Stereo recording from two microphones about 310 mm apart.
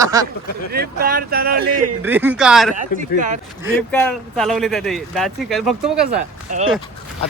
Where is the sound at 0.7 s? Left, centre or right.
Right.